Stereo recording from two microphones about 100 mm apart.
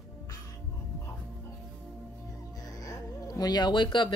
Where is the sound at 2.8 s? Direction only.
40° left (ahead or behind).